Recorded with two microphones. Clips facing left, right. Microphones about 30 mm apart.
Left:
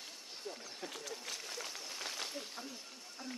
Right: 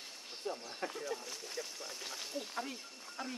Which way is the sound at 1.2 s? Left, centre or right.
Left.